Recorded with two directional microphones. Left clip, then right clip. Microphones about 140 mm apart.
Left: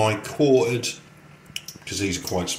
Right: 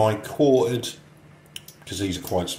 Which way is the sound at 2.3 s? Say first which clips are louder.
Right 1 dB; 30° right (ahead or behind).